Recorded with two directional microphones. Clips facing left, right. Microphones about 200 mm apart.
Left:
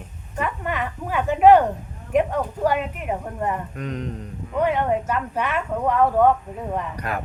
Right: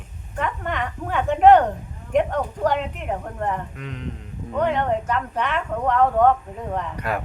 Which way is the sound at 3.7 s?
40° left (ahead or behind).